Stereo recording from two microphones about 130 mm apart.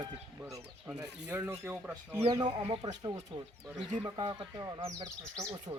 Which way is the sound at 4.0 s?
25° right (ahead or behind).